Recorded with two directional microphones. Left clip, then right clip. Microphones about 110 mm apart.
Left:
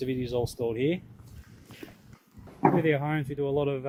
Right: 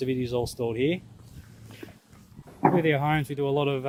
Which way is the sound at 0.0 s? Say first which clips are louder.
Right 2 dB; 50° right (ahead or behind).